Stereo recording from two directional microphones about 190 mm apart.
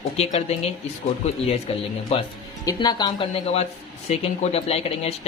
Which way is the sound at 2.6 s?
20° left (ahead or behind).